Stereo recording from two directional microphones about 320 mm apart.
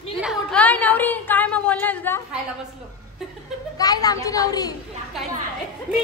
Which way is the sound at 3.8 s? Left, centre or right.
Centre.